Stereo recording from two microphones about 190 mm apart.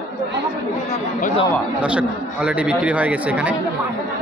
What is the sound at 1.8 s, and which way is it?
Speech, 5° right (ahead or behind).